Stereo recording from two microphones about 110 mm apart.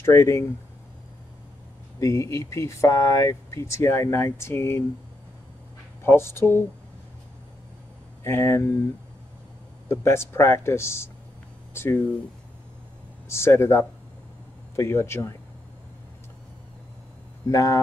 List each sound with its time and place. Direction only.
0.0 s speech: 25° left (ahead or behind)
2.0 s speech: 30° left (ahead or behind)
6.0 s speech: 20° left (ahead or behind)
8.2 s speech: 25° left (ahead or behind)
9.8 s speech: 25° left (ahead or behind)
13.3 s speech: 25° left (ahead or behind)
17.5 s speech: 30° left (ahead or behind)